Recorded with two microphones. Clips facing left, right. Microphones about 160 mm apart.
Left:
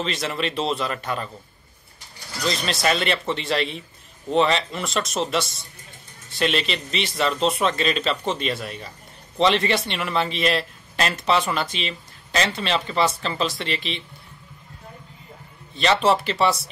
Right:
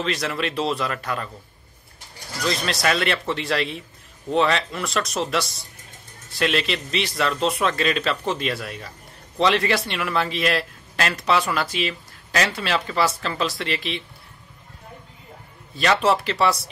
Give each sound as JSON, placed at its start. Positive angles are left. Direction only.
{"t": 0.0, "sound": "a man's voice", "side_deg": 0}
{"t": 2.4, "sound": "a man's voice", "side_deg": 0}
{"t": 15.7, "sound": "a man's voice", "side_deg": 25}
{"t": 16.0, "sound": "a man's voice", "side_deg": 0}